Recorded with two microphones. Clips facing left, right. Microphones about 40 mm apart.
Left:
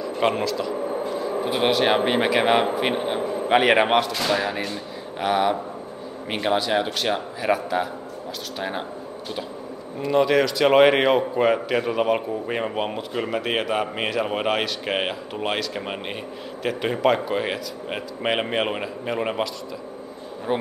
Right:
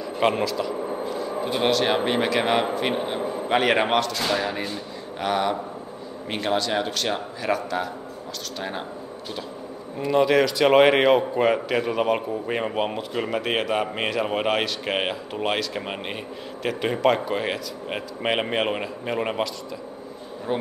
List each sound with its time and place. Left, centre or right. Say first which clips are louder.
0.0 s a man's voice: even; centre
9.9 s a man's voice: even; centre
20.5 s a man's voice: left 2 dB; centre